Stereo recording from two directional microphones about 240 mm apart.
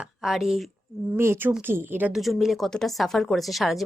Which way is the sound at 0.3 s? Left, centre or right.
Centre.